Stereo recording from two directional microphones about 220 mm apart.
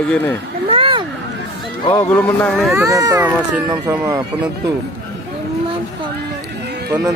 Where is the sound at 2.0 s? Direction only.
5° left (ahead or behind).